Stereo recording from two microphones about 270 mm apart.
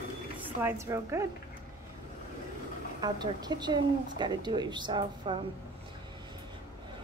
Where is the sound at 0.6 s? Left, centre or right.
Centre.